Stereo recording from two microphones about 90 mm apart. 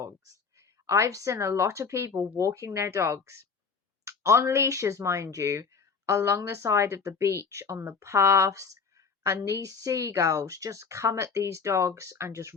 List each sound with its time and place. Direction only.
0.9 s speech: 35° right (ahead or behind)